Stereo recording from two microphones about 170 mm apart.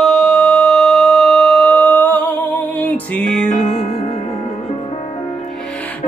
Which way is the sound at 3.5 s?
45° left (ahead or behind).